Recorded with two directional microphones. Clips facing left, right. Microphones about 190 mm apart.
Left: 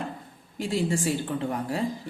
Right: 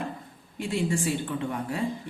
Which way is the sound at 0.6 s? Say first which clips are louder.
Left 1 dB; 35° left (ahead or behind).